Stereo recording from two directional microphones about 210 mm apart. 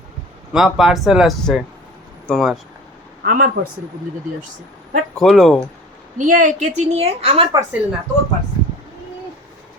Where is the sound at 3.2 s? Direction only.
45° right (ahead or behind).